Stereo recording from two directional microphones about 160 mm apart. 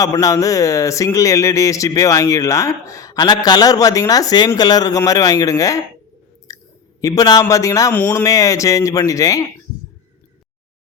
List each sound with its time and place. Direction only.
0.0 s speech: 20° left (ahead or behind)
6.5 s chewing: 20° left (ahead or behind)
7.0 s speech: 25° left (ahead or behind)
7.9 s speech: 10° left (ahead or behind)
8.2 s speech: 20° left (ahead or behind)